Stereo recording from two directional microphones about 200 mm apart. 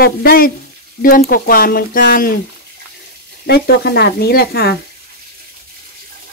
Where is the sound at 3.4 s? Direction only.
55° left (ahead or behind).